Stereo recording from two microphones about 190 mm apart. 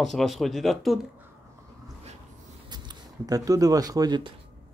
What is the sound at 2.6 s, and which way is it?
Speech, 20° right (ahead or behind).